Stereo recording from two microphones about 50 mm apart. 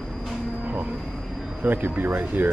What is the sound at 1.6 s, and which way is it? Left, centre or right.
Speech, right.